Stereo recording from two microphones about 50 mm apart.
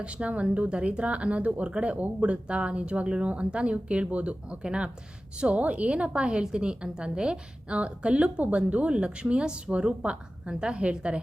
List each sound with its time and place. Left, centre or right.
0.0 s a woman's voice: right